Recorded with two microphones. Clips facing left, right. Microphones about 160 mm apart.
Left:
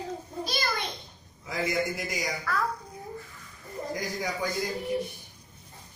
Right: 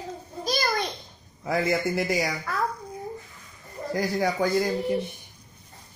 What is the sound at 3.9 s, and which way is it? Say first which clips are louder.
Speech: right 9 dB; 65° right (ahead or behind).